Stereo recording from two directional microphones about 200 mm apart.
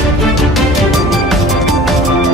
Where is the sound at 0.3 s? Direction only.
Centre (ahead or behind).